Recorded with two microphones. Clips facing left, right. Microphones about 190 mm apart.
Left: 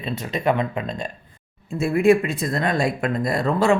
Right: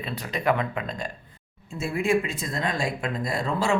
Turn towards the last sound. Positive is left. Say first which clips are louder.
# left 6 dB
turn(degrees=55)  # may be behind; listen again after turning